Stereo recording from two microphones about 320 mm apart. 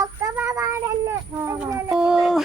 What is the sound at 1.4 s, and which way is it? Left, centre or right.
Speech, centre.